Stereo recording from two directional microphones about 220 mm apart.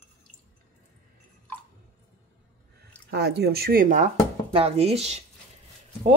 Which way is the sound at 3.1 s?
50° right (ahead or behind).